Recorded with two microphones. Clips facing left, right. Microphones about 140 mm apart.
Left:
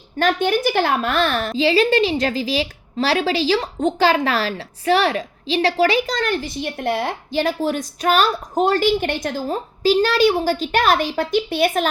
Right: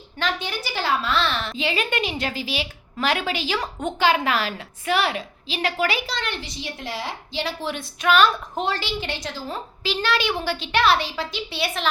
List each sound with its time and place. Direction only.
0.2 s a woman's voice: 50° left (ahead or behind)
1.5 s a woman's voice: 35° left (ahead or behind)